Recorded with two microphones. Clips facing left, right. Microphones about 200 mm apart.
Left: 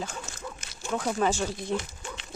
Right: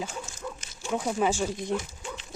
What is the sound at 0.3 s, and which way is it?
Dog, 70° left (ahead or behind).